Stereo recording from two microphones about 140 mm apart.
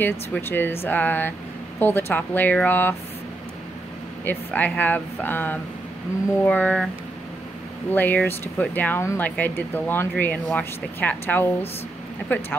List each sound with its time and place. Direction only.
0.0 s speech: 15° left (ahead or behind)
4.2 s speech: 15° left (ahead or behind)
7.9 s speech: 15° left (ahead or behind)